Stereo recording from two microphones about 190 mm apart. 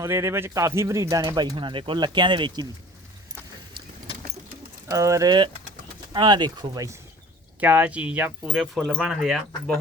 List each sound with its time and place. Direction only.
0.0 s speech: 15° right (ahead or behind)
4.9 s speech: 15° right (ahead or behind)
7.6 s speech: 10° right (ahead or behind)